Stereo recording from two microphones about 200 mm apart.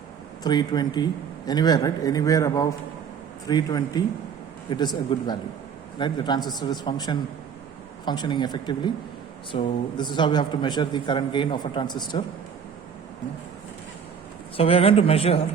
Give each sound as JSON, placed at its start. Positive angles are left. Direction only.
{"t": 0.4, "sound": "a man's voice", "side_deg": 20}
{"t": 14.5, "sound": "a man's voice", "side_deg": 30}